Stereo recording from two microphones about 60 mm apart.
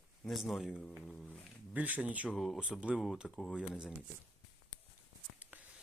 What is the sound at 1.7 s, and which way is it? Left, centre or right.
Speech, right.